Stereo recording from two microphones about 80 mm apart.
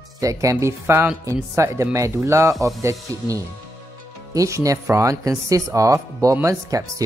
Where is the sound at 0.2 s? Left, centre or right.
Right.